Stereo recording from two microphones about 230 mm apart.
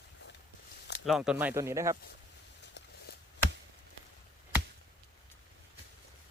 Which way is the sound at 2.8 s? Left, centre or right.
Left.